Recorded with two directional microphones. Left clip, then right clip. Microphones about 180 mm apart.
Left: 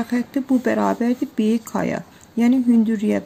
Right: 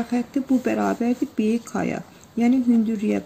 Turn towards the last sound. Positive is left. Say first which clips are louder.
# left 3 dB
turn(degrees=30)  # may be behind; listen again after turning